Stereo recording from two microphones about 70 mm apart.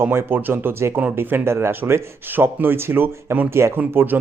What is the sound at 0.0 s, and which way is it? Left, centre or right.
Speech, right.